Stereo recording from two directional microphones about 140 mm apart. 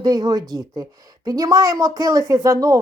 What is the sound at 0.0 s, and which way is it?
Speech, 30° right (ahead or behind).